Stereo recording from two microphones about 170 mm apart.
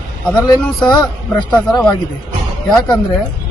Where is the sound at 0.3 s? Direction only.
5° left (ahead or behind).